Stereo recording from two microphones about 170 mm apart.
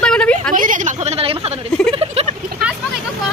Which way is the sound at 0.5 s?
50° right (ahead or behind).